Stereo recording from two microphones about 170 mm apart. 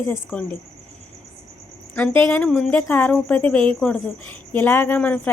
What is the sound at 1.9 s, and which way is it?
A woman's voice, 10° left (ahead or behind).